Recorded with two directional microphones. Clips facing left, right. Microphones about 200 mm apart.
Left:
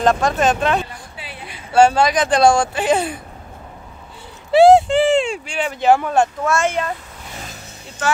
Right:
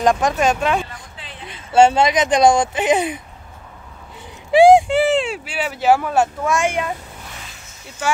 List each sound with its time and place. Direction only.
0.0 s speech: 15° right (ahead or behind)
1.1 s a sound: 10° left (ahead or behind)
1.7 s speech: 25° right (ahead or behind)
4.5 s speech: 15° right (ahead or behind)
8.0 s speech: 10° right (ahead or behind)